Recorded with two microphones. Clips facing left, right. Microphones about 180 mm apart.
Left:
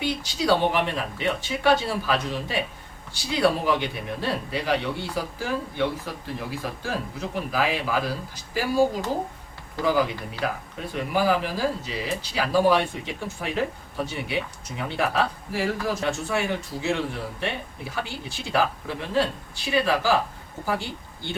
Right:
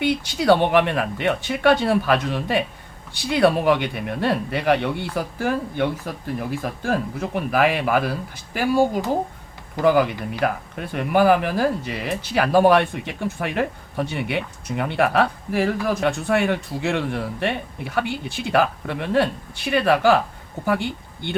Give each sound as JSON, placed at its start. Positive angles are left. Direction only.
{"t": 0.0, "sound": "speech", "side_deg": -60}
{"t": 9.8, "sound": "speech", "side_deg": -60}